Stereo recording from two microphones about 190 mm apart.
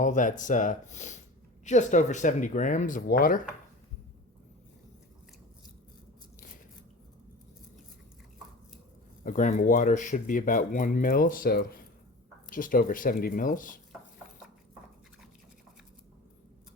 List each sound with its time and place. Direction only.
0.0 s speech: 40° left (ahead or behind)
9.2 s speech: 45° left (ahead or behind)